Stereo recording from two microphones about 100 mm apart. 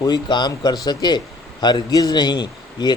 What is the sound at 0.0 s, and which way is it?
Speech, 45° left (ahead or behind).